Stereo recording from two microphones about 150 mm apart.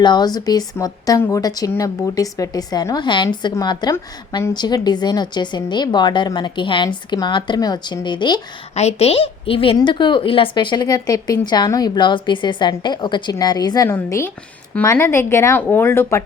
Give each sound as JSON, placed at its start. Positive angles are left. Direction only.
{"t": 0.0, "sound": "speech", "side_deg": 30}
{"t": 8.7, "sound": "speech", "side_deg": 45}